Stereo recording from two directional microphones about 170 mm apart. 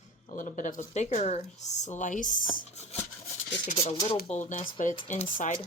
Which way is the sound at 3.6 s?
35° left (ahead or behind).